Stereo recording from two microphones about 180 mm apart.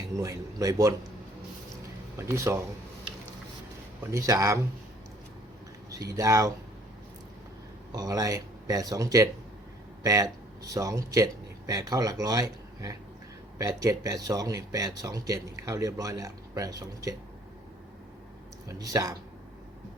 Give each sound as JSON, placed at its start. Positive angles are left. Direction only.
{"t": 0.1, "sound": "speech", "side_deg": -20}
{"t": 2.1, "sound": "speech", "side_deg": -15}
{"t": 4.1, "sound": "speech", "side_deg": -20}
{"t": 5.9, "sound": "speech", "side_deg": -20}
{"t": 7.9, "sound": "speech", "side_deg": -20}
{"t": 18.7, "sound": "speech", "side_deg": -20}